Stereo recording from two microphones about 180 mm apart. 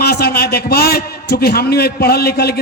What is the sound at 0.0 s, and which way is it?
A man's voice, 60° left (ahead or behind).